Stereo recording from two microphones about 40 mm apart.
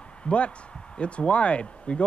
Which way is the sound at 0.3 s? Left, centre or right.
Left.